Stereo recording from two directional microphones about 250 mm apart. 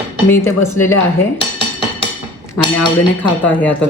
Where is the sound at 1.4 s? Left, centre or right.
Right.